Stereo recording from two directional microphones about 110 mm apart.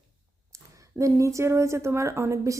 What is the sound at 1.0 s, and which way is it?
Speech, 30° right (ahead or behind).